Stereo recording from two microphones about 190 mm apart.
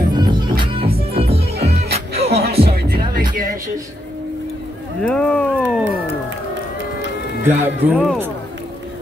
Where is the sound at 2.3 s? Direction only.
55° right (ahead or behind).